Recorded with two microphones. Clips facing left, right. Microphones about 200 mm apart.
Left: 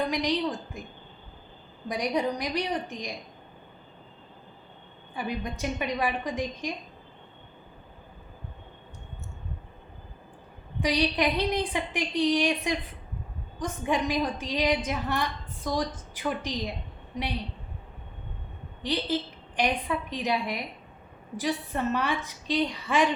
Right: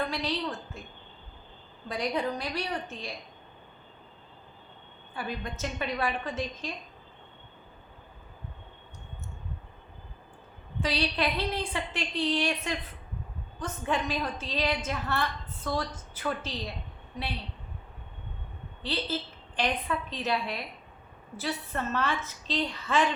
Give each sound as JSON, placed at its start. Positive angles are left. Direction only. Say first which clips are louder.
{"t": 0.0, "sound": "a woman's voice", "louder": "left 4 dB", "side_deg": 15}
{"t": 1.9, "sound": "a woman's voice", "louder": "left 3 dB", "side_deg": 15}
{"t": 5.1, "sound": "a woman's voice", "louder": "left 3 dB", "side_deg": 15}
{"t": 10.8, "sound": "a woman's voice", "louder": "left 4 dB", "side_deg": 15}
{"t": 18.8, "sound": "a woman's voice", "louder": "left 4 dB", "side_deg": 15}